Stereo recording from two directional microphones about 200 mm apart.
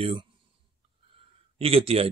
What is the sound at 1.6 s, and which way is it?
Speech, 30° right (ahead or behind).